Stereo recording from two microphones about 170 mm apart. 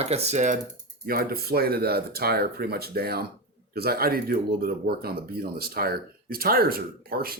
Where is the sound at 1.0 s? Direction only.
60° right (ahead or behind).